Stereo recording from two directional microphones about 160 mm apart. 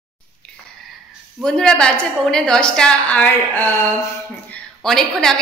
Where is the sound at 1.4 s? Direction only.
5° left (ahead or behind).